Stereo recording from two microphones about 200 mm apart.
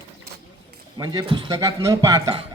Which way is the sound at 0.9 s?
20° right (ahead or behind).